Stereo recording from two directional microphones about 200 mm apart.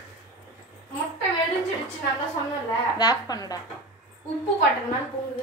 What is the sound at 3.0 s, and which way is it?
Speech, 20° left (ahead or behind).